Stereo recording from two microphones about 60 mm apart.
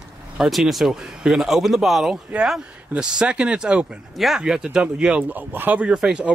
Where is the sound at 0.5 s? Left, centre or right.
Centre.